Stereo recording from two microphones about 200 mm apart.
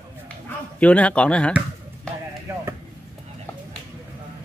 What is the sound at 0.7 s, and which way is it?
Speech, 5° left (ahead or behind).